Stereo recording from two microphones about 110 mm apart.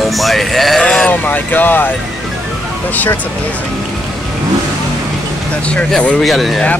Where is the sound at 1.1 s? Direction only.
15° left (ahead or behind).